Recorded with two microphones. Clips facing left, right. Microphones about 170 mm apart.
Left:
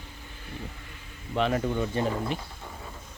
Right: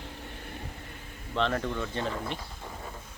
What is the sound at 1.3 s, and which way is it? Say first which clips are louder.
Speech: left 3 dB; 10° left (ahead or behind).